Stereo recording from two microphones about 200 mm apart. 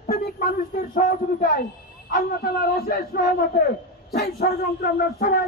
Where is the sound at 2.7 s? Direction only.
50° left (ahead or behind).